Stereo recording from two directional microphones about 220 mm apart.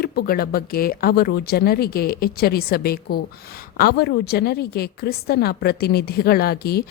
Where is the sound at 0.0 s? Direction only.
45° left (ahead or behind).